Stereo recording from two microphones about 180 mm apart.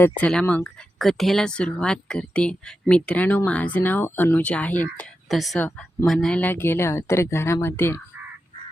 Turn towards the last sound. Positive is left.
turn(degrees=15)  # may be behind; listen again after turning